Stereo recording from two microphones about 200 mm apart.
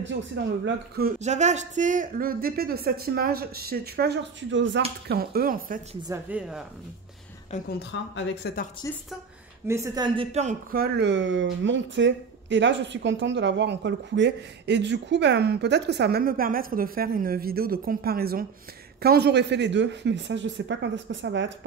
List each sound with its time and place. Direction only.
0.7 s speech: 50° right (ahead or behind)
1.2 s speech: 35° right (ahead or behind); by 4.8 s 65° right (ahead or behind)
5.0 s speech: 50° right (ahead or behind)
6.0 s speech: 10° right (ahead or behind)
7.5 s a woman's voice: 35° left (ahead or behind)
7.9 s speech: 70° left (ahead or behind)
8.4 s speech: 55° left (ahead or behind)
8.8 s speech: 15° left (ahead or behind)
9.7 s a man's voice: 15° right (ahead or behind)
10.7 s speech: 55° right (ahead or behind)